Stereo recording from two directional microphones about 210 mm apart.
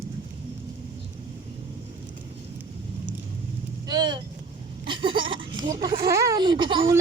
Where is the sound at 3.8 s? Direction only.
20° right (ahead or behind).